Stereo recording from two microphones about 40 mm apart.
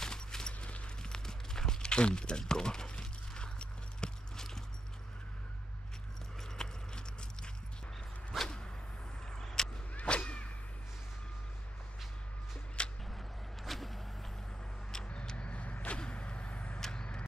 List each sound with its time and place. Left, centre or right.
0.0 s a sound: centre
0.6 s clip-clop: left
1.0 s a sound: centre
6.5 s clip-clop: centre
9.3 s vehicle: centre
9.9 s whip: left
12.8 s a sound: left
13.7 s vehicle: centre
15.3 s vehicle: left
16.0 s arrow: left
16.9 s vehicle: left